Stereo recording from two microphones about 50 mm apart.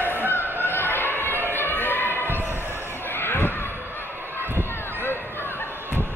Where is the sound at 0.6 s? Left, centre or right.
Left.